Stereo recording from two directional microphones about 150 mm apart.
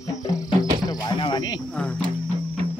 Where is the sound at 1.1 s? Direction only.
35° left (ahead or behind).